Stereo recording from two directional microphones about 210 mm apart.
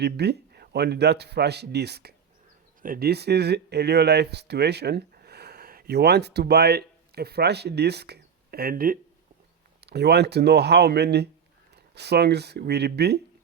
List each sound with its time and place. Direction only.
0.0 s speech: 50° right (ahead or behind)